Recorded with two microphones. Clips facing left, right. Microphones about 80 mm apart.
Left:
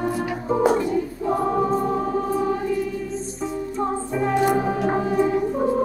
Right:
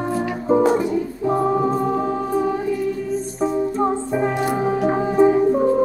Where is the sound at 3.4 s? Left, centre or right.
Right.